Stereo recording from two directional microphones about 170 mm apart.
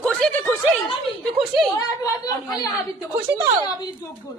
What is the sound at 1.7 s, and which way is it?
Speech, 20° left (ahead or behind).